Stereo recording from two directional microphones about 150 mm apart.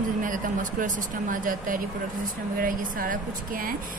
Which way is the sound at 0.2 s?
60° right (ahead or behind).